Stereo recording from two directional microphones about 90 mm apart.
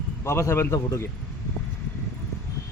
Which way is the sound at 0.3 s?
30° left (ahead or behind).